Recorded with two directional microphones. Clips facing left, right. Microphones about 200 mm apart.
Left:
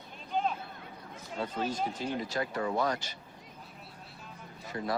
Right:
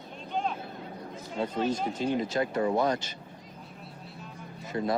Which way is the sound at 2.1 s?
25° right (ahead or behind).